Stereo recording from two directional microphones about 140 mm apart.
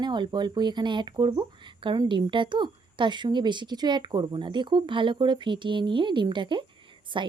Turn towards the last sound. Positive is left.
turn(degrees=-35)  # may be behind; listen again after turning